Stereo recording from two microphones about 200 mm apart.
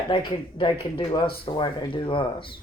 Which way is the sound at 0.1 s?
25° left (ahead or behind).